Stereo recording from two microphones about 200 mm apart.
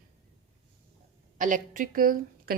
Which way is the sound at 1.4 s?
40° right (ahead or behind).